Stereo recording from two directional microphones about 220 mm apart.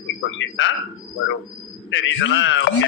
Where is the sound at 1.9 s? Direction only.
60° left (ahead or behind).